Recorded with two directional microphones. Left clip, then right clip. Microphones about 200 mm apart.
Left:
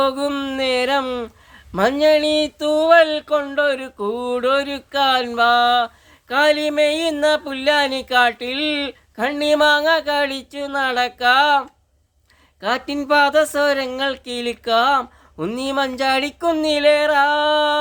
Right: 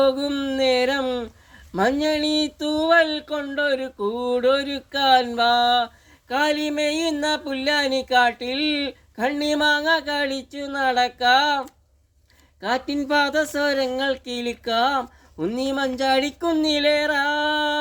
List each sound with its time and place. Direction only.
0.0 s speech: 20° left (ahead or behind)